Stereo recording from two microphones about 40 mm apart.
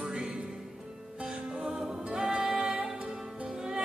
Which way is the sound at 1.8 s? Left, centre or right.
Centre.